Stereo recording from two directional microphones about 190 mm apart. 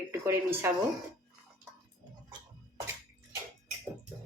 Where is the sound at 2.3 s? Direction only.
20° right (ahead or behind).